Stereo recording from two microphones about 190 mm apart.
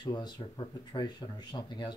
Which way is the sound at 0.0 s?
25° left (ahead or behind).